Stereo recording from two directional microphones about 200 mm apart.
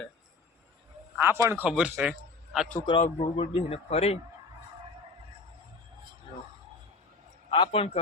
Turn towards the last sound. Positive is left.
turn(degrees=30)  # may be behind; listen again after turning